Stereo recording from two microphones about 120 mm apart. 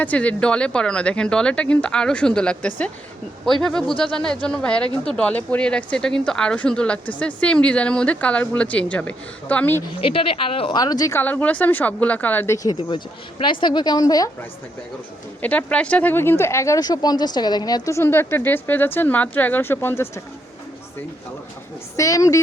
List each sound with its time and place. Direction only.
0.0 s speech: 10° left (ahead or behind)
10.0 s speech: 50° left (ahead or behind)
10.8 s a woman's voice: 35° left (ahead or behind)
11.1 s speech: 15° left (ahead or behind)
13.4 s a woman's voice: 40° left (ahead or behind)
15.4 s speech: 15° left (ahead or behind)
21.9 s speech: 25° left (ahead or behind)